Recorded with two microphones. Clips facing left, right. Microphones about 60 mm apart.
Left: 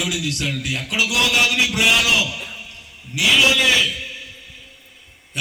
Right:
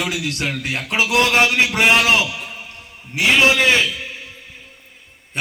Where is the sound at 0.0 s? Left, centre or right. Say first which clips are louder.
Right 1 dB; right.